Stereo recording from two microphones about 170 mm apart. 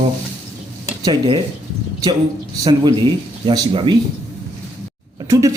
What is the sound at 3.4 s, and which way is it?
Speech, 25° right (ahead or behind).